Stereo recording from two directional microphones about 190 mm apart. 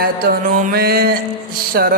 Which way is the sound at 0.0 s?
45° right (ahead or behind).